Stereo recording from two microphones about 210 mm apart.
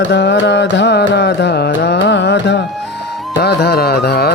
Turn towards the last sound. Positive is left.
turn(degrees=50)  # may be behind; listen again after turning